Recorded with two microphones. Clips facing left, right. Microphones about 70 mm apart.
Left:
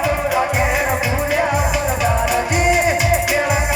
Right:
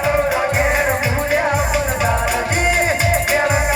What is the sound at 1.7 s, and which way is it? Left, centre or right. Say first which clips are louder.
Music: even; right.